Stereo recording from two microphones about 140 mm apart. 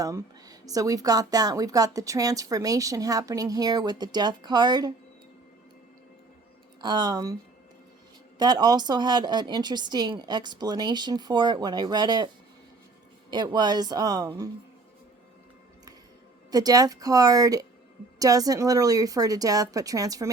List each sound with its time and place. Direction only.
0.0 s a woman's voice: 25° right (ahead or behind)
6.8 s a woman's voice: 30° right (ahead or behind)
8.4 s a woman's voice: 30° right (ahead or behind)
13.3 s a woman's voice: 30° right (ahead or behind)
16.5 s a woman's voice: 25° right (ahead or behind)